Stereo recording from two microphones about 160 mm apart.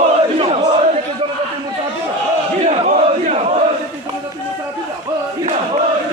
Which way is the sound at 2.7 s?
45° right (ahead or behind).